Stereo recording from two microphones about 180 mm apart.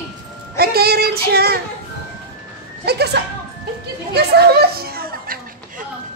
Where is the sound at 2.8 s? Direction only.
65° right (ahead or behind).